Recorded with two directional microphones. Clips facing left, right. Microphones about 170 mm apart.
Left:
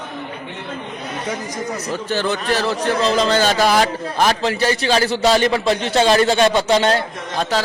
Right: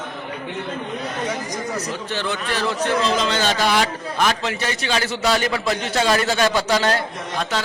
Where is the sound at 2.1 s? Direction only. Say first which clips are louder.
Left 7 dB; 40° left (ahead or behind).